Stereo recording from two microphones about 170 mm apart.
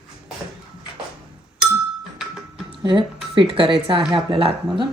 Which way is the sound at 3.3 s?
30° right (ahead or behind).